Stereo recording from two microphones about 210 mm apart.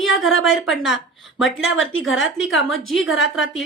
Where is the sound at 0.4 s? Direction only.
Centre (ahead or behind).